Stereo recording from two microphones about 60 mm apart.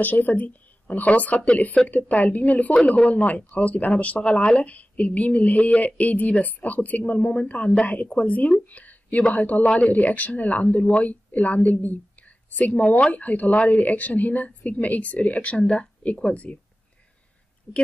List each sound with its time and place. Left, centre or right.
0.0 s speech: left